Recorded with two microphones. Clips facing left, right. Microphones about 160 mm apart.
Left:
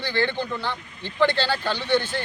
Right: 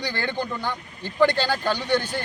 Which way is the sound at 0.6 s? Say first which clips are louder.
Right 1 dB; 45° right (ahead or behind).